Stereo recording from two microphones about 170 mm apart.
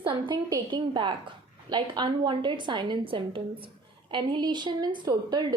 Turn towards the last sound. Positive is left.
turn(degrees=-25)  # may be behind; listen again after turning